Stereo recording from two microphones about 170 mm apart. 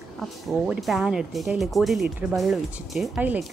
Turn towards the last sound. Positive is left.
turn(degrees=-5)  # may be behind; listen again after turning